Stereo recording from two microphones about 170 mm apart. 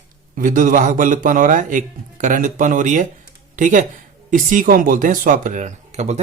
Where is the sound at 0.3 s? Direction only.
50° right (ahead or behind).